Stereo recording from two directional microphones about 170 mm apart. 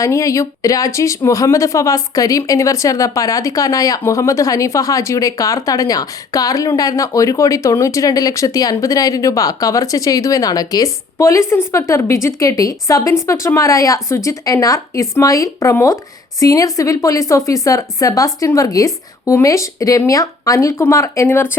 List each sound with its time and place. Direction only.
0.0 s speech: 20° left (ahead or behind)